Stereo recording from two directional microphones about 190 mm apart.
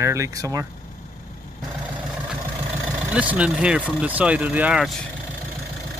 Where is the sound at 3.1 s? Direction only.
5° right (ahead or behind).